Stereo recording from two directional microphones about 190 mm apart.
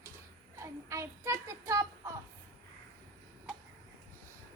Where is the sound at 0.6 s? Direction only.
15° right (ahead or behind).